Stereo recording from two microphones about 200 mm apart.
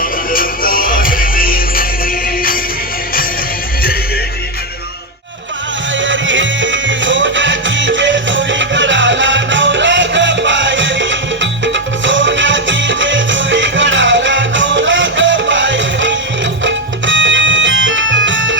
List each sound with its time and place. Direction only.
0.0 s music: 45° left (ahead or behind)
6.0 s music: 70° right (ahead or behind)